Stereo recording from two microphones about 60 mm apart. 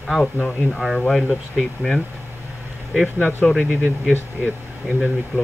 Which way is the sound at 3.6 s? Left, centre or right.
Right.